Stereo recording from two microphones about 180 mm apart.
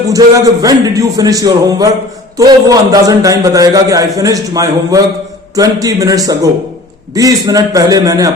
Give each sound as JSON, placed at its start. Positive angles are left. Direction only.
{"t": 0.1, "sound": "a man's voice", "side_deg": -20}